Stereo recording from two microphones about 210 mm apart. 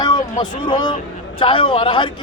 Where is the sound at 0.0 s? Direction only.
20° left (ahead or behind).